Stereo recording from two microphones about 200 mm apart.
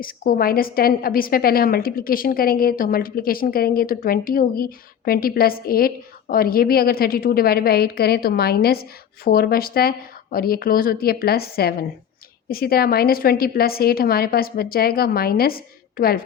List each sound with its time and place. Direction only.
0.0 s a woman's voice: 45° left (ahead or behind)